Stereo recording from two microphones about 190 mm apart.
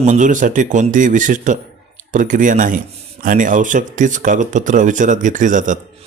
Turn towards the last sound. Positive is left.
turn(degrees=-40)  # may be behind; listen again after turning